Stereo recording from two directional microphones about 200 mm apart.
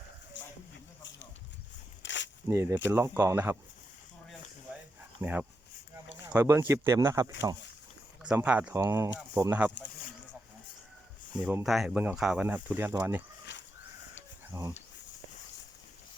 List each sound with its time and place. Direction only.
0.4 s a sound: 65° left (ahead or behind)
2.0 s a sound: 65° left (ahead or behind)
2.5 s speech: 15° right (ahead or behind)
5.2 s speech: 10° right (ahead or behind)
11.4 s speech: 5° right (ahead or behind)
14.5 s speech: 15° right (ahead or behind)